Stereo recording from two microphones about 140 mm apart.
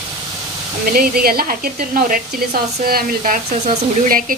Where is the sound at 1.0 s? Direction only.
90° right.